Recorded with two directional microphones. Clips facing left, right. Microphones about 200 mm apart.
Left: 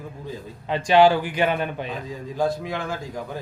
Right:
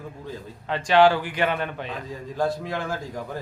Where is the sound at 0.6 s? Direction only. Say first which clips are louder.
Left 2 dB; 15° left (ahead or behind).